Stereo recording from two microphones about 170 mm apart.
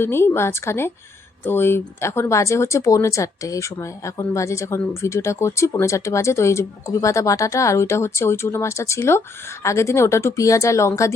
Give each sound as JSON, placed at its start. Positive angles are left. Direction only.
{"t": 0.0, "sound": "speech", "side_deg": 15}